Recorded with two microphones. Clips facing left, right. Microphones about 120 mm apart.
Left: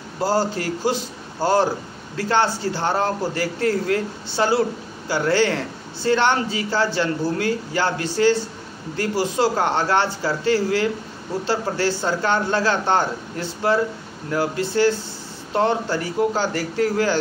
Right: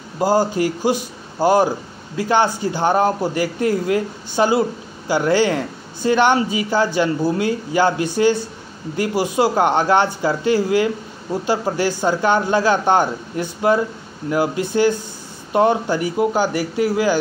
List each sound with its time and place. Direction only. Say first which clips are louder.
0.2 s speech: right 4 dB; 15° right (ahead or behind)